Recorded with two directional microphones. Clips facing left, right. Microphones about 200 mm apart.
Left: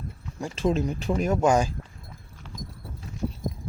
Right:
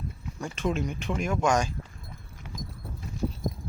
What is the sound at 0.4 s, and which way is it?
Speech, 35° left (ahead or behind).